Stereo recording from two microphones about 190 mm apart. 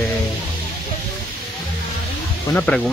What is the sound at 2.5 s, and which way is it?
Speech, 5° left (ahead or behind).